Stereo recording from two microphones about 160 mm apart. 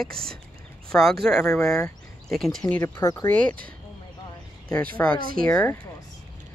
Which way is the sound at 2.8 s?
20° left (ahead or behind).